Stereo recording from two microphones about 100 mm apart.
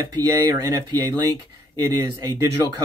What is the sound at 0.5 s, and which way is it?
Speech, 45° right (ahead or behind).